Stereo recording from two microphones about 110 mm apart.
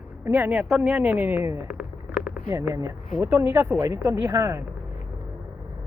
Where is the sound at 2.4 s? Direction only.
25° right (ahead or behind).